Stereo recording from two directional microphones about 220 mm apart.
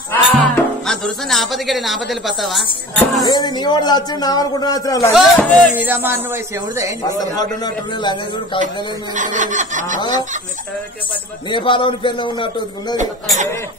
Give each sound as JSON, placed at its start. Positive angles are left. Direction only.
{"t": 0.1, "sound": "speech", "side_deg": 5}
{"t": 3.3, "sound": "a man's voice", "side_deg": 20}
{"t": 5.1, "sound": "speech", "side_deg": 5}
{"t": 5.8, "sound": "speech", "side_deg": -10}
{"t": 7.0, "sound": "a man's voice", "side_deg": 15}
{"t": 9.1, "sound": "snicker", "side_deg": -35}
{"t": 11.5, "sound": "a man's voice", "side_deg": 20}
{"t": 12.9, "sound": "snicker", "side_deg": -35}